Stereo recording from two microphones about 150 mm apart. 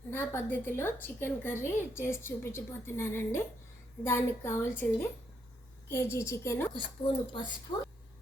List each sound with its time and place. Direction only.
0.1 s a woman's voice: 15° left (ahead or behind)
6.7 s speech: 35° left (ahead or behind)